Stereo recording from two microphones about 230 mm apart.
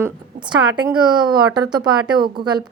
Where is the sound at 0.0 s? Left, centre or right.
Centre.